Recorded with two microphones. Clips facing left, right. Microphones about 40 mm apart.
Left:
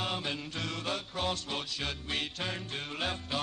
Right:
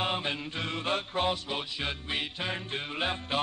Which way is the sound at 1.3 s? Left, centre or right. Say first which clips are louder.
Right 3 dB; centre.